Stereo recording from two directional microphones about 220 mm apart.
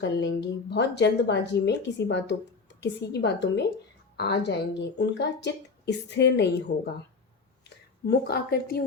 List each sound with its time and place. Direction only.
0.0 s a woman's voice: 50° left (ahead or behind)
8.0 s a woman's voice: 45° left (ahead or behind)